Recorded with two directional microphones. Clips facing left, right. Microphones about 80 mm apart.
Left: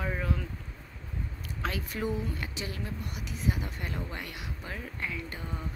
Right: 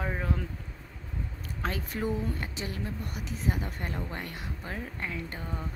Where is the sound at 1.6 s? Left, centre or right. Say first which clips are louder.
Right 1 dB; right.